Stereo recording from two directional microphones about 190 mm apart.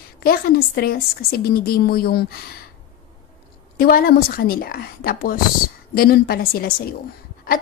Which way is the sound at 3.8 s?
50° left (ahead or behind).